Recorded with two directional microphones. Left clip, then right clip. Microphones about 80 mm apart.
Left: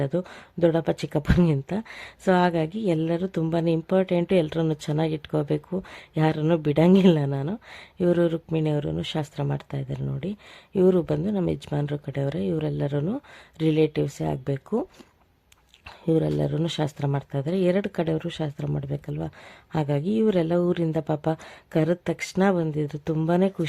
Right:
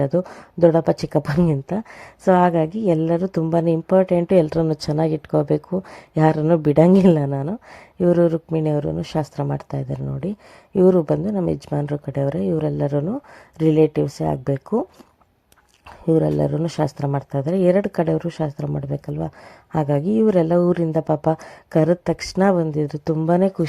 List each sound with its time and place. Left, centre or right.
0.2 s speech: centre
4.9 s speech: centre
6.1 s speech: right
7.2 s speech: centre
10.8 s speech: centre
13.9 s speech: centre
16.0 s speech: centre
17.7 s speech: right
23.1 s speech: centre
23.4 s speech: right